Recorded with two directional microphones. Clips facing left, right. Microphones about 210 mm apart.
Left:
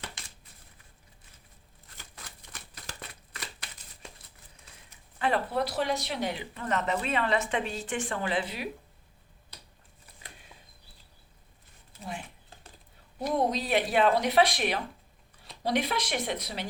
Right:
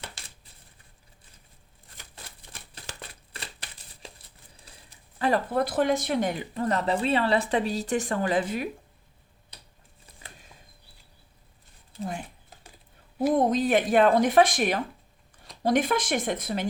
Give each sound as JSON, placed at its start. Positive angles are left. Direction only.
{"t": 2.1, "sound": "shuffling cards", "side_deg": -30}
{"t": 4.5, "sound": "speech", "side_deg": -35}
{"t": 13.3, "sound": "a woman's voice", "side_deg": -50}